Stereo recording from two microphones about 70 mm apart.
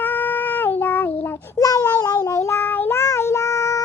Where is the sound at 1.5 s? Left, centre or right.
Left.